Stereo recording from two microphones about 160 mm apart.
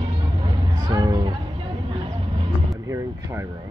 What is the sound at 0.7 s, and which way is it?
Music, 25° right (ahead or behind).